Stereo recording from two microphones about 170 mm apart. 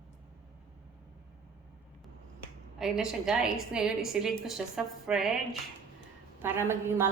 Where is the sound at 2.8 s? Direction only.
5° right (ahead or behind).